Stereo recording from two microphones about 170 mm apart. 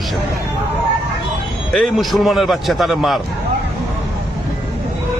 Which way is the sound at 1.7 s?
Centre (ahead or behind).